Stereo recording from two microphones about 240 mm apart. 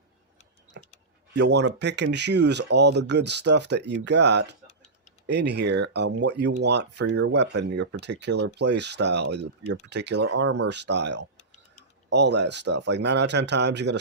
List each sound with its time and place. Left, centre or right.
1.3 s speech: right